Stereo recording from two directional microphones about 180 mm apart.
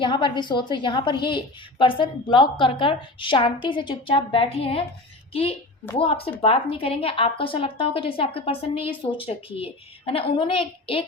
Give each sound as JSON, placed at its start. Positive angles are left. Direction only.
{"t": 0.0, "sound": "a woman's voice", "side_deg": 25}